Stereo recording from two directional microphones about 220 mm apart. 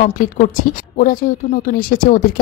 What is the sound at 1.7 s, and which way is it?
Speech, 40° left (ahead or behind).